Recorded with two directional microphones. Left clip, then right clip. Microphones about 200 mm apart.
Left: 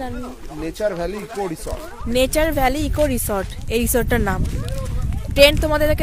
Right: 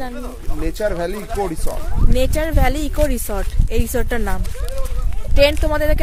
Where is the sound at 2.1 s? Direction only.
25° left (ahead or behind).